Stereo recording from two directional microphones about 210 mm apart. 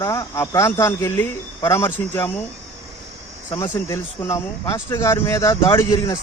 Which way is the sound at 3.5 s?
15° left (ahead or behind).